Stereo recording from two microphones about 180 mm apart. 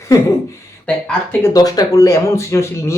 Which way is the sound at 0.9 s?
10° left (ahead or behind).